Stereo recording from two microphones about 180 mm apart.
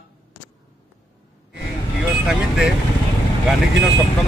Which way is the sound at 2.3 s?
5° right (ahead or behind).